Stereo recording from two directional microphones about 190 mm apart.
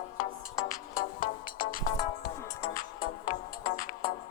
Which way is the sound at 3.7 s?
45° left (ahead or behind).